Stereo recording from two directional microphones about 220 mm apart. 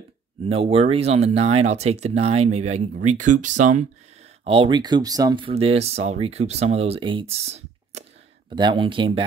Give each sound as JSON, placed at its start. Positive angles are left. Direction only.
{"t": 0.5, "sound": "speech", "side_deg": -25}
{"t": 4.5, "sound": "speech", "side_deg": -25}